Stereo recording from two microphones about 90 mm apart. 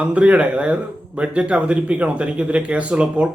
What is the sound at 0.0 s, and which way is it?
Speech, 15° right (ahead or behind).